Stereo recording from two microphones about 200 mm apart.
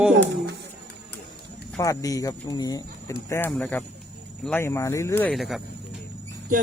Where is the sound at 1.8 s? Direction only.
15° left (ahead or behind); by 5.6 s centre (ahead or behind).